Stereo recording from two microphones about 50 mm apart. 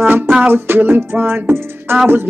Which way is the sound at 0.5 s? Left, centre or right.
Right.